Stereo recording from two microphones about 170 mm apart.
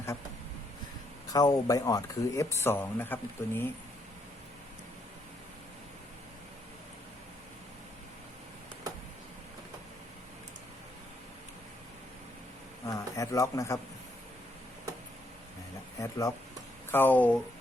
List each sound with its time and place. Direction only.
1.3 s speech: 20° left (ahead or behind)
12.9 s a sound: 20° left (ahead or behind)
16.0 s speech: 20° left (ahead or behind)